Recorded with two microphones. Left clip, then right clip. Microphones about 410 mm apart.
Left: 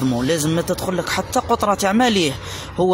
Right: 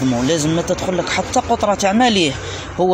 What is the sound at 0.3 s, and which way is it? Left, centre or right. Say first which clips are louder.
Speech: right 2 dB; left.